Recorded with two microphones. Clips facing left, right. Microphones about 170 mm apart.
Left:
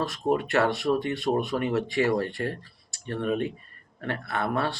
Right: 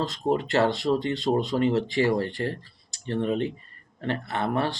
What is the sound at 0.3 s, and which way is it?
Speech, 25° right (ahead or behind).